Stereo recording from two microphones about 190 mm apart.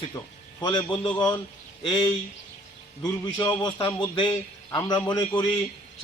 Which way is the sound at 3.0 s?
20° left (ahead or behind).